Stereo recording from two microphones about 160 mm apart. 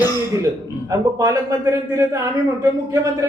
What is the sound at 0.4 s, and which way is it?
A man's voice, 20° right (ahead or behind).